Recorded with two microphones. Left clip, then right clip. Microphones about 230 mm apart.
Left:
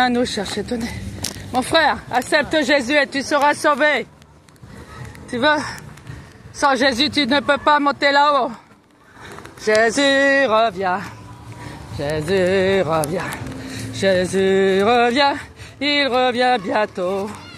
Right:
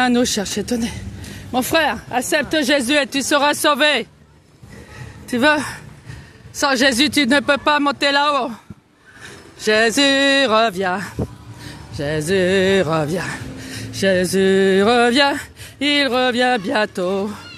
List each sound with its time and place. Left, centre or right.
0.0 s speech: right
5.3 s speech: right
9.7 s speech: right